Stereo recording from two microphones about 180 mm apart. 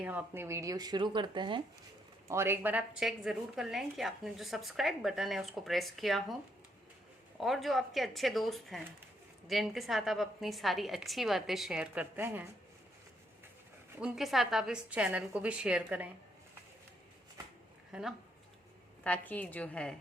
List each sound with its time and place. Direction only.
0.0 s speech: 10° right (ahead or behind); by 1.6 s 25° right (ahead or behind)
2.2 s a woman's voice: 15° right (ahead or behind)
14.0 s a woman's voice: centre (ahead or behind)
17.9 s a woman's voice: 5° right (ahead or behind)
19.0 s a woman's voice: 10° left (ahead or behind)